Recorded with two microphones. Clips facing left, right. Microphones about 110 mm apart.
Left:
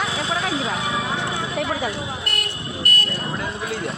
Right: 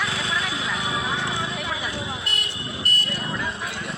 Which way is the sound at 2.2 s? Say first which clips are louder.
Left 3 dB; 55° left (ahead or behind).